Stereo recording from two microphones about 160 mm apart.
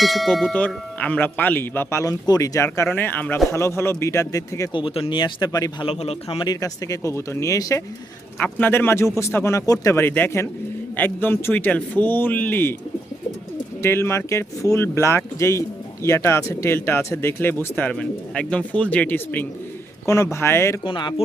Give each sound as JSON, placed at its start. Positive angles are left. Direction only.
{"t": 0.0, "sound": "speech", "side_deg": 0}
{"t": 2.9, "sound": "speech", "side_deg": 10}
{"t": 4.7, "sound": "speech", "side_deg": 35}
{"t": 5.9, "sound": "a man's voice", "side_deg": 40}
{"t": 6.4, "sound": "speech", "side_deg": 25}
{"t": 13.8, "sound": "speech", "side_deg": 15}
{"t": 20.8, "sound": "speech", "side_deg": 30}